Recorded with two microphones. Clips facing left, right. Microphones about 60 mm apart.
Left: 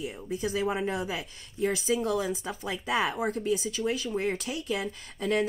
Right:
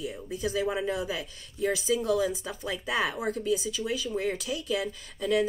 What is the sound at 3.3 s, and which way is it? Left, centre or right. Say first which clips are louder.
A woman's voice: even; left.